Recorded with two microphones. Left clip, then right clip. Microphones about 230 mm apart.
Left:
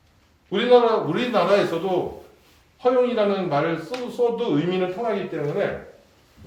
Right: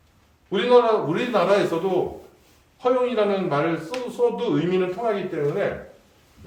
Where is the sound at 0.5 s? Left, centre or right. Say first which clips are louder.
Even; centre.